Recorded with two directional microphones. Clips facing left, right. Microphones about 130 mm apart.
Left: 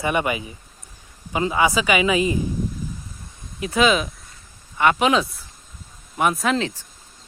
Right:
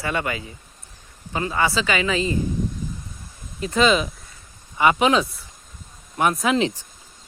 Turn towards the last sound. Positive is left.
turn(degrees=0)  # may be behind; listen again after turning